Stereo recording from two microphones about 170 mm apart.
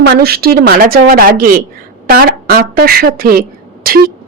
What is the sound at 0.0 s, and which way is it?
A woman's voice, 65° right (ahead or behind).